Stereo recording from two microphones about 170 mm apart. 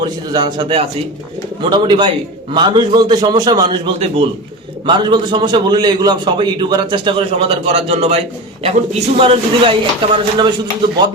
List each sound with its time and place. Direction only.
0.3 s a man's voice: 25° right (ahead or behind)